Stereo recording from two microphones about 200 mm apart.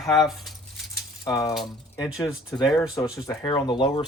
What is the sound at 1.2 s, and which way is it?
Speech, 20° left (ahead or behind).